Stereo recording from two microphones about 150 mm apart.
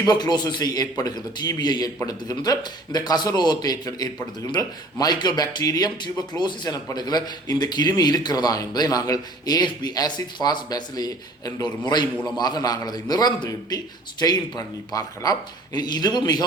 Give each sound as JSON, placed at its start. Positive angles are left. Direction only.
{"t": 0.0, "sound": "speech", "side_deg": 30}